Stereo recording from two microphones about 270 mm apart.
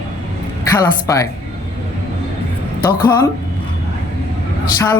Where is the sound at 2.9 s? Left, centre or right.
Centre.